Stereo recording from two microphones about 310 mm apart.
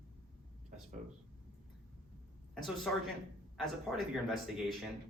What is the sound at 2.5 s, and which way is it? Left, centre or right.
Speech, centre.